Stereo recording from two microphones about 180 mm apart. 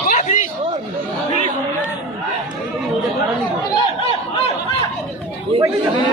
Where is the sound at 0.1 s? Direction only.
45° left (ahead or behind).